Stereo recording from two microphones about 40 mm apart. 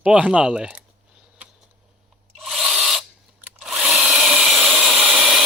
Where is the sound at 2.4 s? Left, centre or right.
Centre.